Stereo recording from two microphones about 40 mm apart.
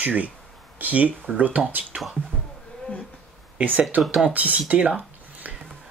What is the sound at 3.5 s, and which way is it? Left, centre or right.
Speech, right.